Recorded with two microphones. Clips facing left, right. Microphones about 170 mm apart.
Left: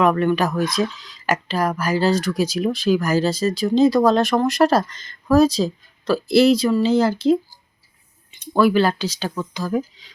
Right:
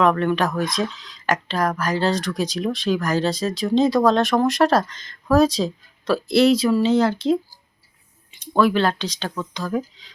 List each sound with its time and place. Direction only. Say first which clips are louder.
0.0 s speech: left 1 dB; 5° left (ahead or behind)